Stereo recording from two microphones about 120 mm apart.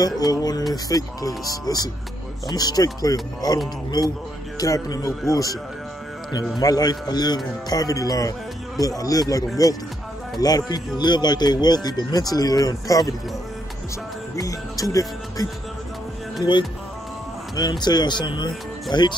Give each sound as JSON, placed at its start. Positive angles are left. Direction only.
{"t": 0.0, "sound": "a man's voice", "side_deg": 35}
{"t": 6.6, "sound": "a man's voice", "side_deg": 30}
{"t": 9.6, "sound": "music", "side_deg": 30}
{"t": 10.4, "sound": "a man's voice", "side_deg": 35}
{"t": 14.3, "sound": "music", "side_deg": 30}
{"t": 16.5, "sound": "a man's voice", "side_deg": 40}